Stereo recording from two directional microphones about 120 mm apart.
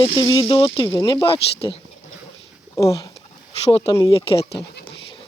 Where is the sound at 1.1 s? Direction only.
45° left (ahead or behind).